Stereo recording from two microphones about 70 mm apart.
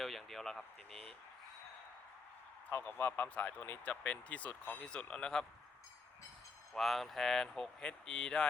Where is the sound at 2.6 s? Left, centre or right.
Left; by 5.5 s centre.